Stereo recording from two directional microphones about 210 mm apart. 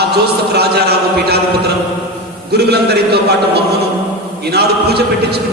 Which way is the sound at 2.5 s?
50° right (ahead or behind).